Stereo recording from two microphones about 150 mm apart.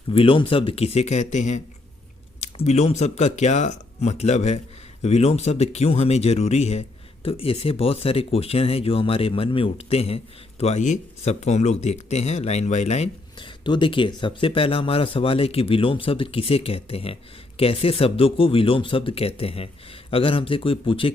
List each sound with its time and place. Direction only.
0.1 s speech: 35° left (ahead or behind)
13.4 s speech: 35° left (ahead or behind)